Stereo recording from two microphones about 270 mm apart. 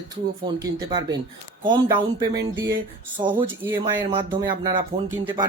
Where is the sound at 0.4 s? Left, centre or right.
Centre.